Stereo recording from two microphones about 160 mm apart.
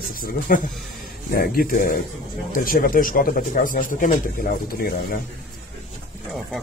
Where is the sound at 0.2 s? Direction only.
60° left (ahead or behind).